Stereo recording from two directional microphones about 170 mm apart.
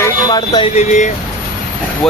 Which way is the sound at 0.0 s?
20° left (ahead or behind).